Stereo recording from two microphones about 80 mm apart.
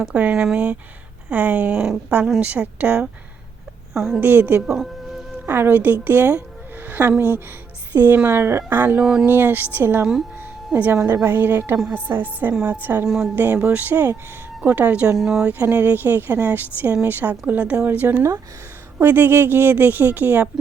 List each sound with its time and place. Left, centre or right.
0.0 s speech: centre
4.2 s speech: right
4.6 s music: centre
5.5 s speech: right
6.8 s a sound: right
7.2 s speech: right
9.0 s speech: centre
9.2 s a woman's voice: right
10.9 s a woman's voice: right
13.1 s speech: centre
13.3 s speech: right
15.2 s speech: centre
15.4 s speech: right
18.0 s a woman's voice: right